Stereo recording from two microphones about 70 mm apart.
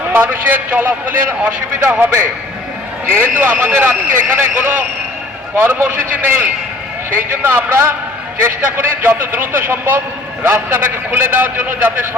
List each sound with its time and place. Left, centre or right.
0.1 s a man's voice: right